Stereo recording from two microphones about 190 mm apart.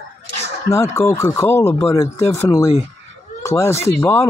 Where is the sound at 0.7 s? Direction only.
15° left (ahead or behind).